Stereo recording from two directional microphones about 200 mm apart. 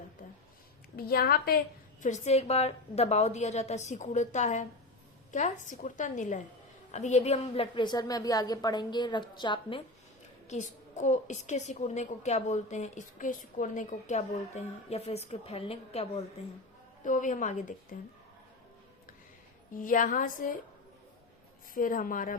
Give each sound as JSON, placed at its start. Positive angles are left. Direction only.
{"t": 0.9, "sound": "a woman's voice", "side_deg": 50}
{"t": 10.5, "sound": "a woman's voice", "side_deg": 35}
{"t": 19.7, "sound": "a woman's voice", "side_deg": 40}
{"t": 21.8, "sound": "a woman's voice", "side_deg": 45}